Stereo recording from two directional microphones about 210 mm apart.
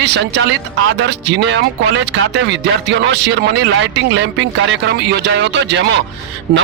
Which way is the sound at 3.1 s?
55° right (ahead or behind).